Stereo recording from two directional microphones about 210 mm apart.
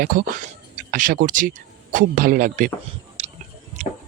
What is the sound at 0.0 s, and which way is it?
Speech, 40° right (ahead or behind).